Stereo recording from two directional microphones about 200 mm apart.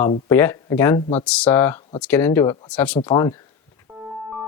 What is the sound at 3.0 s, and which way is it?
Speech, 20° left (ahead or behind).